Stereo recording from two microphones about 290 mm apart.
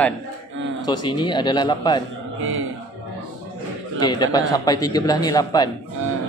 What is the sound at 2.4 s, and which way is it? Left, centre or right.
Speech, right.